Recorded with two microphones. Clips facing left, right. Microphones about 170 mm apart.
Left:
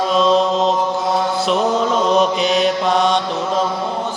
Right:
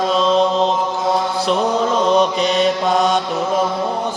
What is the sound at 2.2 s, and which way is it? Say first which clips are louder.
Mantra: even; centre (ahead or behind).